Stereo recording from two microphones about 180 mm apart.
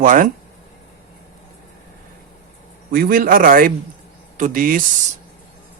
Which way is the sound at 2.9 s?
55° right (ahead or behind).